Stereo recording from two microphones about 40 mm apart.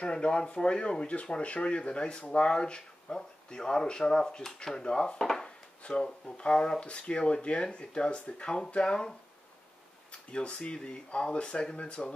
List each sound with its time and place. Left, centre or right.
0.0 s speech: left
5.2 s chopping: centre
5.9 s speech: left
10.3 s speech: left